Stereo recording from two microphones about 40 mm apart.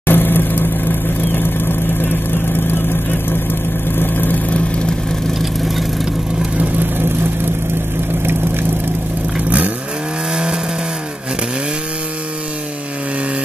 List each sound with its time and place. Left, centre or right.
0.0 s vehicle: left
3.9 s vehicle: left
10.3 s vehicle: centre